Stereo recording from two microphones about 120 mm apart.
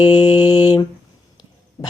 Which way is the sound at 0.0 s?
40° left (ahead or behind).